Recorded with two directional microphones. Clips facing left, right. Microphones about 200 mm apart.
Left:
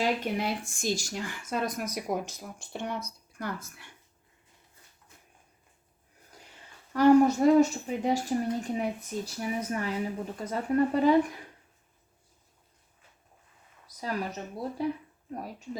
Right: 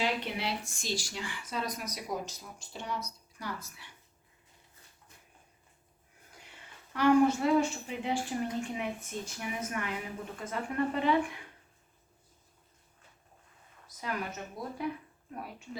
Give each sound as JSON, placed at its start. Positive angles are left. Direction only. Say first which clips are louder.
{"t": 0.0, "sound": "speech", "louder": "left 4 dB", "side_deg": 45}
{"t": 6.9, "sound": "a woman's voice", "louder": "left 4 dB", "side_deg": 40}
{"t": 14.0, "sound": "a woman's voice", "louder": "left 4 dB", "side_deg": 35}